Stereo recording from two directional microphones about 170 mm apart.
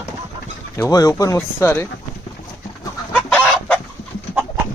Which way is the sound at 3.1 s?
5° left (ahead or behind).